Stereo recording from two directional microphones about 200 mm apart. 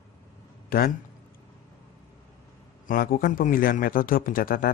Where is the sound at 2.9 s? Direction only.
45° left (ahead or behind).